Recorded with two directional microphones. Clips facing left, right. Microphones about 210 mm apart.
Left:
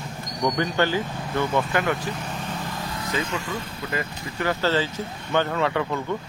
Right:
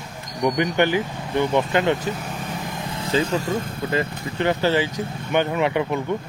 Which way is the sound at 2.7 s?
25° right (ahead or behind).